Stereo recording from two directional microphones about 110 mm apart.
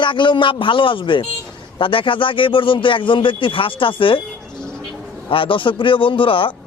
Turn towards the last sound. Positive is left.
turn(degrees=50)  # may be behind; listen again after turning